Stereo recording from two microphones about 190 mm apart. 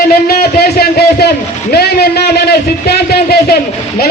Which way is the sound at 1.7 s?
55° left (ahead or behind).